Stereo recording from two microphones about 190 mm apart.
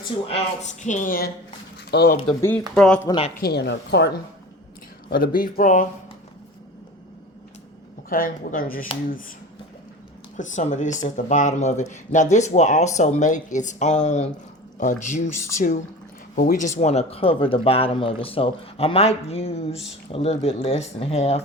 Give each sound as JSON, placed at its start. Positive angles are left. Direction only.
{"t": 0.3, "sound": "speech", "side_deg": 35}
{"t": 1.9, "sound": "speech", "side_deg": 60}
{"t": 2.7, "sound": "speech", "side_deg": 5}
{"t": 3.1, "sound": "speech", "side_deg": 30}
{"t": 3.4, "sound": "speech", "side_deg": 60}
{"t": 5.0, "sound": "speech", "side_deg": 50}
{"t": 8.1, "sound": "speech", "side_deg": 50}
{"t": 10.3, "sound": "speech", "side_deg": 40}
{"t": 15.4, "sound": "speech", "side_deg": 15}
{"t": 16.3, "sound": "speech", "side_deg": 45}